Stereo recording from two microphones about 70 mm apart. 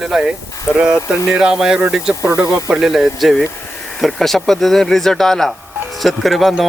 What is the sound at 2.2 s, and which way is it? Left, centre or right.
Speech, right.